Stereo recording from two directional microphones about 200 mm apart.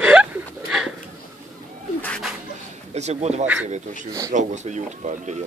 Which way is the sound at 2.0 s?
5° left (ahead or behind).